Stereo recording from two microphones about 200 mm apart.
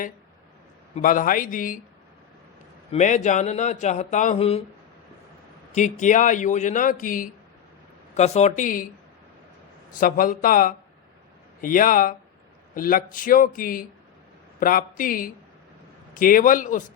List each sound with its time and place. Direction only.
0.9 s speech: 40° left (ahead or behind)
2.9 s speech: 35° left (ahead or behind)
5.7 s speech: 40° left (ahead or behind)
10.0 s a man's voice: 45° left (ahead or behind)